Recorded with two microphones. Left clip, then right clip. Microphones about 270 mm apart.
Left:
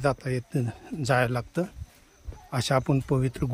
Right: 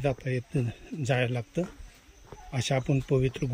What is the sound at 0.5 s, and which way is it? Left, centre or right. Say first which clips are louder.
Speech: left 1 dB; left.